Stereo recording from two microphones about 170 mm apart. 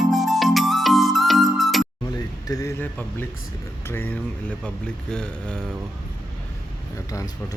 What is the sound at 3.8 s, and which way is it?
Speech, 10° left (ahead or behind).